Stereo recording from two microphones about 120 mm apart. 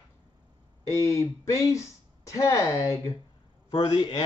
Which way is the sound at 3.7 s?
40° left (ahead or behind).